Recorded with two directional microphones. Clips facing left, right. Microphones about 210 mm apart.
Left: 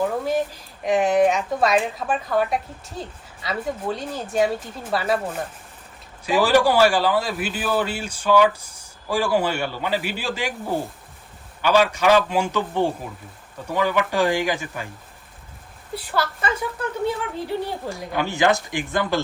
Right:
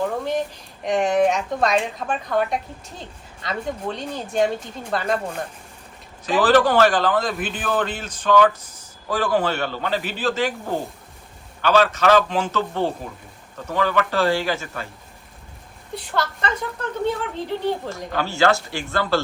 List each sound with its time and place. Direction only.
0.0 s a sound: 5° left (ahead or behind)
0.9 s a man's voice: 5° left (ahead or behind)
16.0 s a man's voice: 5° left (ahead or behind)
17.8 s a man's voice: 15° left (ahead or behind)